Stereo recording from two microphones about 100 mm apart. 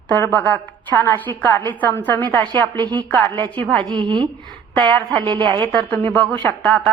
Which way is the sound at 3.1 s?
20° left (ahead or behind).